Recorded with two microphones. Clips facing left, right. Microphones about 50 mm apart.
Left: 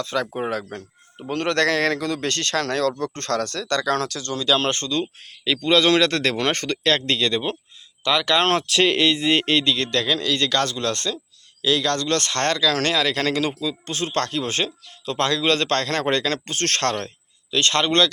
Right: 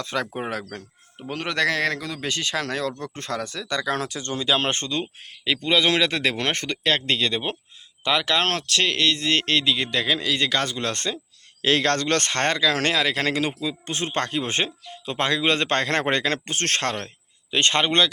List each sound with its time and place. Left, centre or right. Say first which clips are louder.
0.0 s speech: left 2 dB; right
0.3 s speech: left 3 dB; centre
4.2 s speech: left 2 dB; right
8.4 s speech: left 4 dB; centre
9.7 s speech: left 1 dB; centre
11.6 s speech: even; right; by 17.1 s centre
17.5 s speech: left 1 dB; right